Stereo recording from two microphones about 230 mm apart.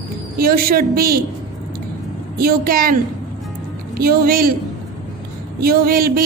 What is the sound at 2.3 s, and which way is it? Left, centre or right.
Speech, right.